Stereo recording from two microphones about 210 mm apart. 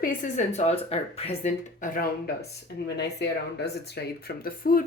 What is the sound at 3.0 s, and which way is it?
Speech, 55° left (ahead or behind).